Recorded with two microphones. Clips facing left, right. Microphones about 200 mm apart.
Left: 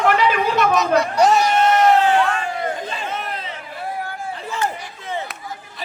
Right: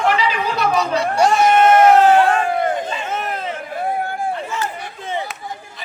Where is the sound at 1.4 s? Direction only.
50° right (ahead or behind).